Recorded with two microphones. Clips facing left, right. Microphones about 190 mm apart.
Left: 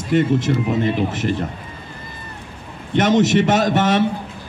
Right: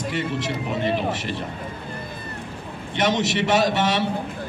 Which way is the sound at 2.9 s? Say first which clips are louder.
Left 7 dB; 50° left (ahead or behind).